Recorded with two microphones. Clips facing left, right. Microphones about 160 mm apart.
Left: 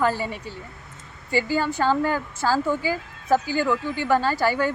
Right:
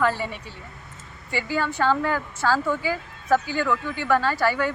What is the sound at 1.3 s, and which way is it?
Speech, 35° left (ahead or behind).